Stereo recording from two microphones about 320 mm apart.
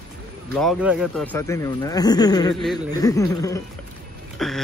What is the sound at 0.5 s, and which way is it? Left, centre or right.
Speech, centre.